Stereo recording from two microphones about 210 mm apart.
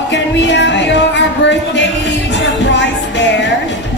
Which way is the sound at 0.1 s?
60° left (ahead or behind).